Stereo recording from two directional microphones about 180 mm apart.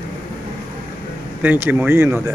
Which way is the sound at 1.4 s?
10° right (ahead or behind).